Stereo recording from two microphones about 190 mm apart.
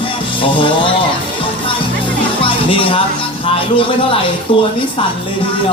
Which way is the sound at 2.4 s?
25° left (ahead or behind).